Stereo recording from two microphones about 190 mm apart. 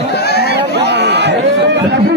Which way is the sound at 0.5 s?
60° right (ahead or behind).